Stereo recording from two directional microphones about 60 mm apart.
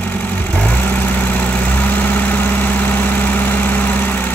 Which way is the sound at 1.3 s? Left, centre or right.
Left.